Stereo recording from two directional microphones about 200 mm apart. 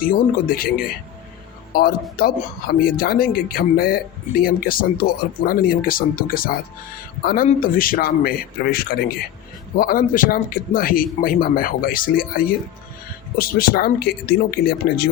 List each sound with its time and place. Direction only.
0.1 s speech: 45° left (ahead or behind)
1.7 s speech: 50° left (ahead or behind)